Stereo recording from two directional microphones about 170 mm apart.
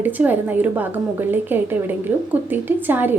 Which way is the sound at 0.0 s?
10° right (ahead or behind).